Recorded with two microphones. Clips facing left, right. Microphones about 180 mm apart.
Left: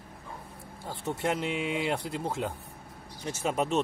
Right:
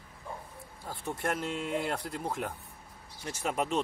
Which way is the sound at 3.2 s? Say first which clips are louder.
Left 3 dB; 25° left (ahead or behind).